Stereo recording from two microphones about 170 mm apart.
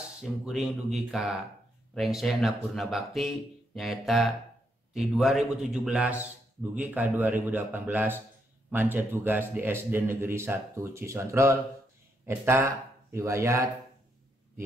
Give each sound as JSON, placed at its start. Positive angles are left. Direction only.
{"t": 0.2, "sound": "a man's voice", "side_deg": 0}